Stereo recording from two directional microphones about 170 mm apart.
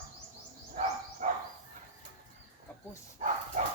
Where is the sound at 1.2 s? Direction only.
45° right (ahead or behind).